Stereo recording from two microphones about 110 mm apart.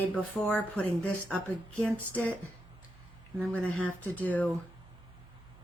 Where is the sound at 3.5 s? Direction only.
15° left (ahead or behind).